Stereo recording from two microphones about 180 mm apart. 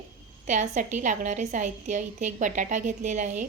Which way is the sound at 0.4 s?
40° right (ahead or behind).